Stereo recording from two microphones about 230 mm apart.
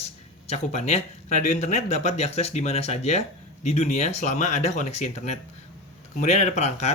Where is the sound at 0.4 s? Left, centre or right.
Left.